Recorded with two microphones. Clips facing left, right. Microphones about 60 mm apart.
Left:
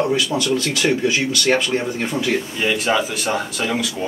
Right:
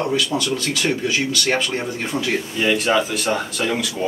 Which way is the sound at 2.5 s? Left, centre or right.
Centre.